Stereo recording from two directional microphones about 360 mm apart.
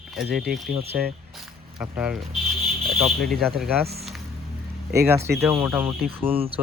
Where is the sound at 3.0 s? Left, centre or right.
Centre.